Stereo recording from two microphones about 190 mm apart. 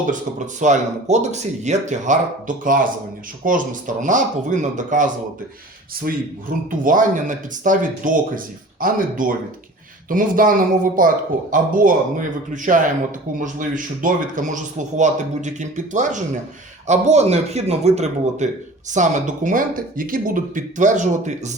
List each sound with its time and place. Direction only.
0.0 s a man's voice: 40° right (ahead or behind)
6.1 s speech: 50° right (ahead or behind)
13.4 s a man's voice: 45° right (ahead or behind)